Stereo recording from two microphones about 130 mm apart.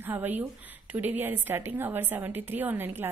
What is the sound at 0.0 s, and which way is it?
A woman's voice, 15° right (ahead or behind).